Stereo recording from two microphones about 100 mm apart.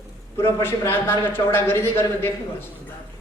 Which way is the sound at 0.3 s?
25° left (ahead or behind).